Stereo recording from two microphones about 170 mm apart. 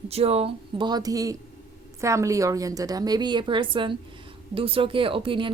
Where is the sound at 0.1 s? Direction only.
35° right (ahead or behind).